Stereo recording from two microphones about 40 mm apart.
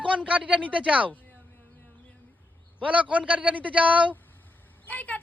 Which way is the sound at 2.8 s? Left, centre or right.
Right.